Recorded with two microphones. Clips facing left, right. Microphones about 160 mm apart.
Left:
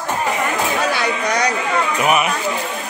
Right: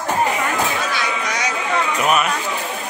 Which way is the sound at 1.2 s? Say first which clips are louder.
Left 5 dB; 65° left (ahead or behind).